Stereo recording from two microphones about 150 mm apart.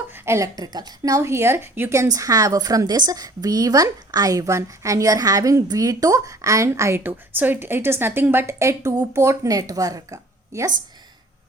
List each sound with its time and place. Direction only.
0.1 s speech: 20° right (ahead or behind)